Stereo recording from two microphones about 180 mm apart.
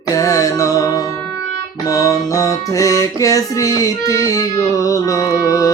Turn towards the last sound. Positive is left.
turn(degrees=20)  # may be behind; listen again after turning